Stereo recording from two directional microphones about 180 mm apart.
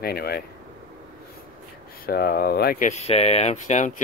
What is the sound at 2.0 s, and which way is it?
Speech, 55° left (ahead or behind).